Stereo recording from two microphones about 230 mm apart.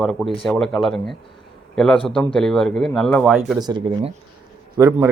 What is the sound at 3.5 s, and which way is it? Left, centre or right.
A man's voice, centre.